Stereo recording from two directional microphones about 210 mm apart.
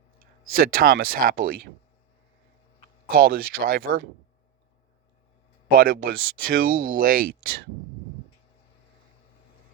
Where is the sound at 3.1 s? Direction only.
45° right (ahead or behind).